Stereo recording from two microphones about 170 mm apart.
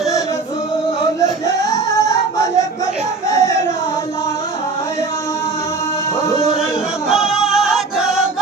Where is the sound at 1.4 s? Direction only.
20° left (ahead or behind).